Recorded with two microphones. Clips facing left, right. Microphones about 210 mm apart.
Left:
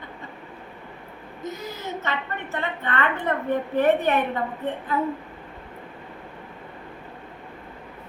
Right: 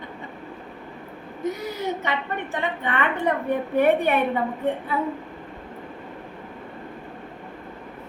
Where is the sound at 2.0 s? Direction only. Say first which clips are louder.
Right 3 dB; 15° right (ahead or behind).